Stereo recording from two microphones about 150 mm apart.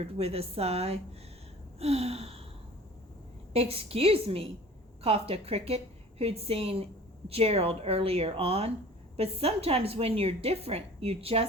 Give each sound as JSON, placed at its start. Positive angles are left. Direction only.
{"t": 0.0, "sound": "a woman's voice", "side_deg": -40}
{"t": 3.5, "sound": "a woman's voice", "side_deg": -40}